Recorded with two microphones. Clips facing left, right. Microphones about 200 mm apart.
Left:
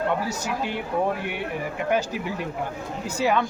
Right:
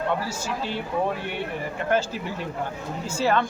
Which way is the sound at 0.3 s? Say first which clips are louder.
Left 2 dB; 15° left (ahead or behind).